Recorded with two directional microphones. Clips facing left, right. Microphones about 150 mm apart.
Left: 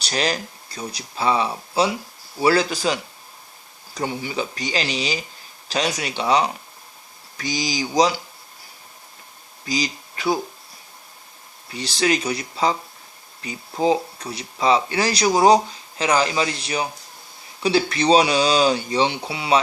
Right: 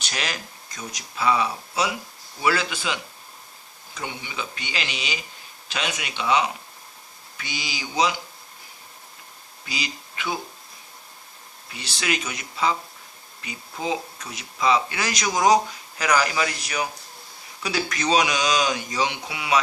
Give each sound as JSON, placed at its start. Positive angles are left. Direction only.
{"t": 0.0, "sound": "speech", "side_deg": 35}
{"t": 9.6, "sound": "speech", "side_deg": 35}
{"t": 11.7, "sound": "speech", "side_deg": 35}